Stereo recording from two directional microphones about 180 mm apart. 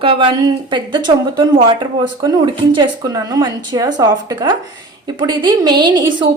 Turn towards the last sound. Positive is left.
turn(degrees=-25)  # may be behind; listen again after turning